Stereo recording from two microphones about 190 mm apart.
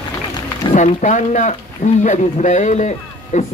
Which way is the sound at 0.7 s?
40° left (ahead or behind).